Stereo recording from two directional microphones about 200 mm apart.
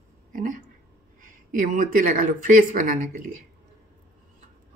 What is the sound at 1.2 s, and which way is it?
Speech, 40° right (ahead or behind).